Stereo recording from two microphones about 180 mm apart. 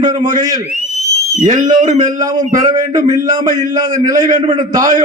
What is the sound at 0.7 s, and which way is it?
Whistle, 40° left (ahead or behind).